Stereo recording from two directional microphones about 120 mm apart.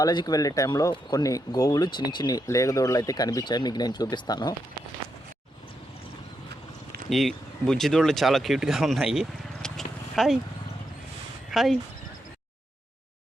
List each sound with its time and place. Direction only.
0.0 s speech: 35° left (ahead or behind)
7.1 s speech: centre (ahead or behind)
11.5 s speech: centre (ahead or behind)